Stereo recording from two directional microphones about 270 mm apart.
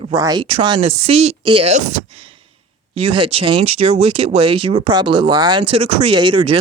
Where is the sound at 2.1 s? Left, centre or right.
Centre.